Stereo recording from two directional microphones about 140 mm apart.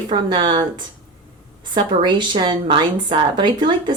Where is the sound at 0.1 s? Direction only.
35° right (ahead or behind).